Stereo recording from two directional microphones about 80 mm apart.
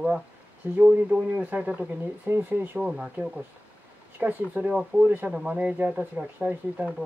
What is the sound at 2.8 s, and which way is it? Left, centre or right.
Speech, centre.